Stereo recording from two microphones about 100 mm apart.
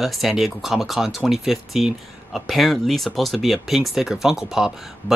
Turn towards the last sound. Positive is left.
turn(degrees=-5)  # may be behind; listen again after turning